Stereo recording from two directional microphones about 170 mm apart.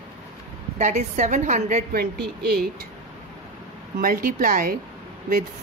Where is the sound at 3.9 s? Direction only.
60° right (ahead or behind).